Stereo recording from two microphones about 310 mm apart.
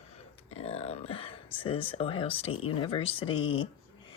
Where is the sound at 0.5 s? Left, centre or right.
Centre.